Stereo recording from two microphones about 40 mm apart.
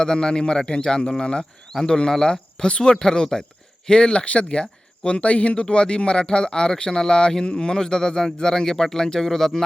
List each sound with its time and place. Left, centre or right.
0.0 s speech: centre